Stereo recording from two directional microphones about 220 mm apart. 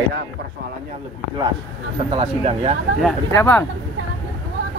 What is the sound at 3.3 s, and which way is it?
Speech, 10° left (ahead or behind).